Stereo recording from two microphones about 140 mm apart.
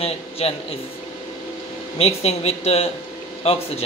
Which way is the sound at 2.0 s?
50° left (ahead or behind).